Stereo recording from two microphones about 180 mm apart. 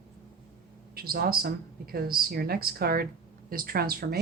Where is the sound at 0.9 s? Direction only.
55° right (ahead or behind).